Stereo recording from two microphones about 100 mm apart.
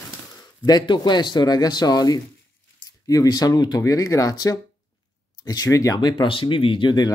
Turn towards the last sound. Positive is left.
turn(degrees=50)  # may be behind; listen again after turning